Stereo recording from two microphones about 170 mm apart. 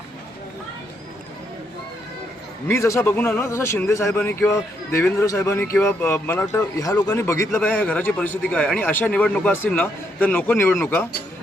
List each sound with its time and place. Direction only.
2.6 s a man's voice: 15° left (ahead or behind)